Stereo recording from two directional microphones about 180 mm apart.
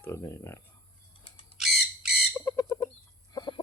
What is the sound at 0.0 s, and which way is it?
Speech, 15° left (ahead or behind).